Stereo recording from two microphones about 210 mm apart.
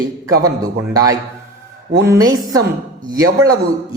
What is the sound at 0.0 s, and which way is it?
Speech, 15° right (ahead or behind).